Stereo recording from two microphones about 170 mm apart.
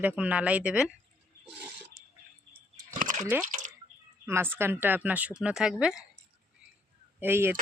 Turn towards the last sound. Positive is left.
turn(degrees=-15)  # may be behind; listen again after turning